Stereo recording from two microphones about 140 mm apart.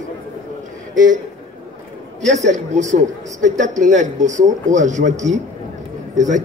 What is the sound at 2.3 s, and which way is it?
A man's voice, 55° right (ahead or behind).